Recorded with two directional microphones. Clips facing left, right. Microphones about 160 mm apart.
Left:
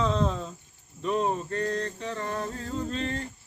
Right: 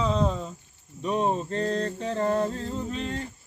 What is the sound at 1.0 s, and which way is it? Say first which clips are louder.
Mantra: right 1 dB; 20° right (ahead or behind).